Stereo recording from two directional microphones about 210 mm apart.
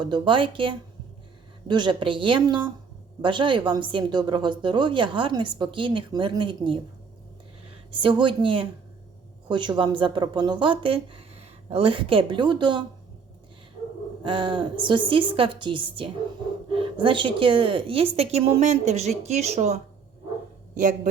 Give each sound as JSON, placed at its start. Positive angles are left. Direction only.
{"t": 0.0, "sound": "a woman's voice", "side_deg": -20}
{"t": 7.9, "sound": "a woman's voice", "side_deg": -25}
{"t": 14.3, "sound": "a woman's voice", "side_deg": -25}